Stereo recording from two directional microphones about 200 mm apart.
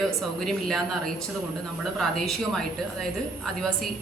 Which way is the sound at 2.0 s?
Centre (ahead or behind).